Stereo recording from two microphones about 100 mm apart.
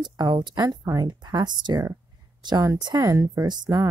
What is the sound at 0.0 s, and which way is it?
Speech, 45° right (ahead or behind).